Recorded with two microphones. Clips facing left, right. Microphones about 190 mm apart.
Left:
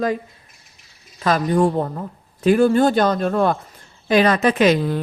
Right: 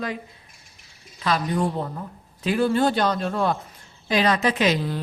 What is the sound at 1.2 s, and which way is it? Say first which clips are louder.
Speech: left 6 dB; 50° left (ahead or behind).